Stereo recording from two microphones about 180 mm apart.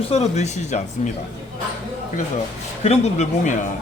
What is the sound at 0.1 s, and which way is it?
Speech, 35° left (ahead or behind).